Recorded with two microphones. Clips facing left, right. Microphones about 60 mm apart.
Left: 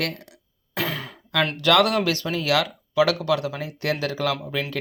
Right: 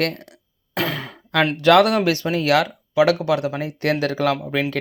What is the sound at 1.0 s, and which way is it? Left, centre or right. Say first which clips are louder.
Sigh: right 4 dB; right.